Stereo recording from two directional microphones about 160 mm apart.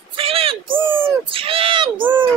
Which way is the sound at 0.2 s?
35° right (ahead or behind).